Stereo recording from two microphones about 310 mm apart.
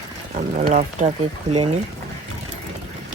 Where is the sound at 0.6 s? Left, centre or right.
Right.